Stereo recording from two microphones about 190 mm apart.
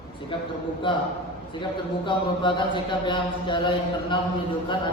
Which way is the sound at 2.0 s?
25° left (ahead or behind).